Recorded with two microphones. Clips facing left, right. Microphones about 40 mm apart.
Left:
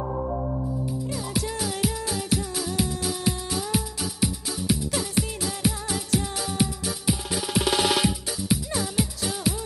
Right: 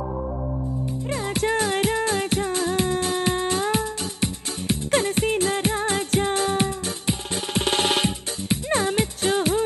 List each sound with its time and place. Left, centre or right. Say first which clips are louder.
1.0 s music: right 5 dB; right
8.6 s music: right 5 dB; right